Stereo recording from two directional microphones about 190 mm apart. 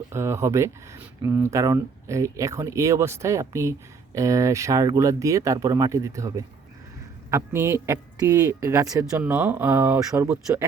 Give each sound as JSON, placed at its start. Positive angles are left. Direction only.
{"t": 0.1, "sound": "speech", "side_deg": -15}